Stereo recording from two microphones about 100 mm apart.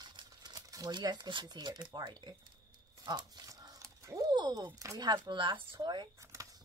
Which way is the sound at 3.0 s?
45° right (ahead or behind).